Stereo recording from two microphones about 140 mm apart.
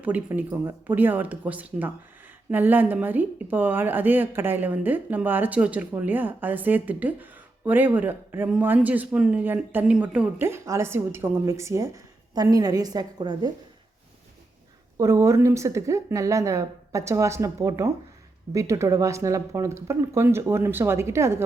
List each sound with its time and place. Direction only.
0.0 s a woman's voice: 10° right (ahead or behind)
10.4 s a woman's voice: 20° right (ahead or behind)
14.9 s a woman's voice: 20° right (ahead or behind)